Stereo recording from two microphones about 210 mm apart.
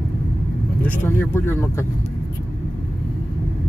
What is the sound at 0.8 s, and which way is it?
Speech, 10° left (ahead or behind).